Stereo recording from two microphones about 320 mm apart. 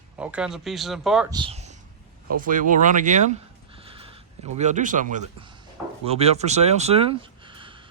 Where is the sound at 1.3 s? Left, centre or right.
Centre.